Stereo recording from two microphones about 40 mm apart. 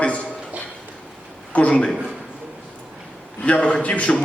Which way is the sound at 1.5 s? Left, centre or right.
Left.